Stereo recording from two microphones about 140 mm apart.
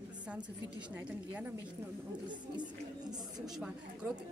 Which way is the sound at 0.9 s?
10° right (ahead or behind).